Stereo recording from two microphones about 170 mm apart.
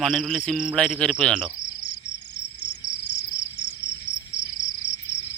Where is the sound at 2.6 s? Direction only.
90° left.